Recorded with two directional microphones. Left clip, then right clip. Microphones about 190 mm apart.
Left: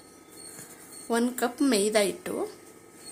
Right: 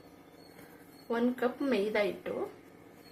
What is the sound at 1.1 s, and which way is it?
Speech, 60° left (ahead or behind).